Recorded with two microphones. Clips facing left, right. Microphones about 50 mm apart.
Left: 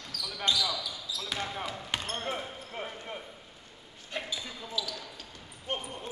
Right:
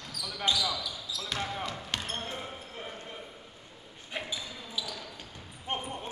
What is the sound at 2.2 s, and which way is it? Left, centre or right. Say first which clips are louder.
Basketball bounce: left 3 dB; left.